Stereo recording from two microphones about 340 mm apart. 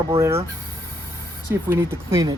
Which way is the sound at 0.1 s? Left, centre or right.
Centre.